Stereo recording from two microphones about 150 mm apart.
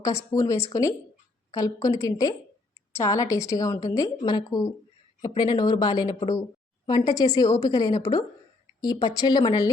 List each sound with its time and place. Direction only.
0.0 s a woman's voice: 20° left (ahead or behind)